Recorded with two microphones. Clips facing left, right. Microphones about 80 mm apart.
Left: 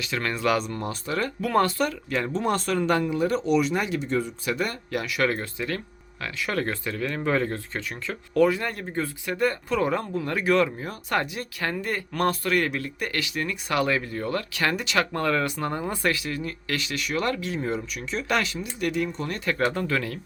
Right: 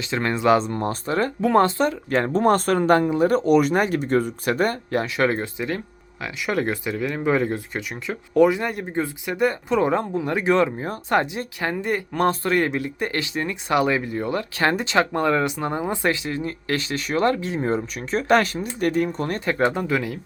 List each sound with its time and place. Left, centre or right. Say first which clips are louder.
0.0 s speech: right 5 dB; right
2.0 s speech: right 7 dB; right; by 14.4 s centre
14.5 s speech: right 5 dB; right
19.5 s speech: right 3 dB; right